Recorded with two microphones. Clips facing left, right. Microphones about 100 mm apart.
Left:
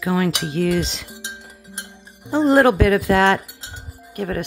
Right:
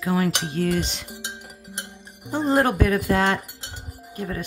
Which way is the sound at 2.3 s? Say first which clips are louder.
Left 6 dB; 90° left.